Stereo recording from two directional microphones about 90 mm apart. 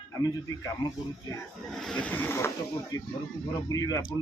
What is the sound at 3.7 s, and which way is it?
Speech, 40° left (ahead or behind).